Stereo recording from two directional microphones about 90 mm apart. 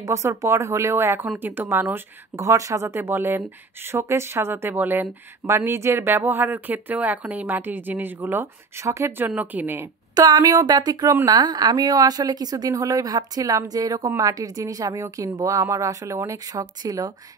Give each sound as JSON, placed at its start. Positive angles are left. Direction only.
{"t": 0.0, "sound": "speech", "side_deg": -35}
{"t": 2.3, "sound": "speech", "side_deg": -35}
{"t": 9.1, "sound": "speech", "side_deg": -20}
{"t": 10.1, "sound": "a woman's voice", "side_deg": -45}